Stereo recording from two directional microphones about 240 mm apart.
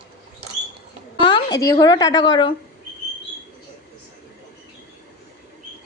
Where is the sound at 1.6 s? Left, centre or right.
Centre.